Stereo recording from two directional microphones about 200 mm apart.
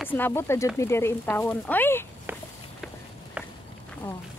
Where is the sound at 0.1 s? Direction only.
10° left (ahead or behind).